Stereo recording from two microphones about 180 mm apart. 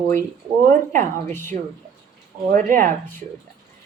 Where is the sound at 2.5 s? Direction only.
50° right (ahead or behind).